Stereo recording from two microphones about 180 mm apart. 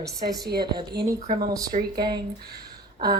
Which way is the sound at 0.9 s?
65° right (ahead or behind).